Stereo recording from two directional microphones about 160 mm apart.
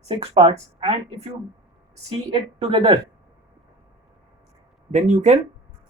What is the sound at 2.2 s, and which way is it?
Speech, 30° right (ahead or behind).